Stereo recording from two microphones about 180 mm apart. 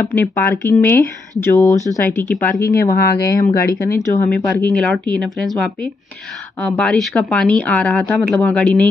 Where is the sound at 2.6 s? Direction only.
60° left (ahead or behind).